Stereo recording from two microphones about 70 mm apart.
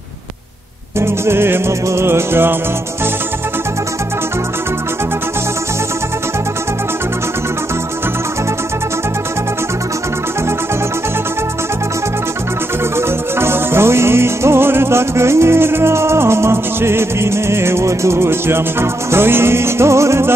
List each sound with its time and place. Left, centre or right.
0.9 s music: right
12.9 s music: right